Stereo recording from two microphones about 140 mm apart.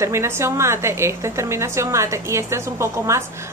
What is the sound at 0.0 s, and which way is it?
A woman's voice, 20° right (ahead or behind).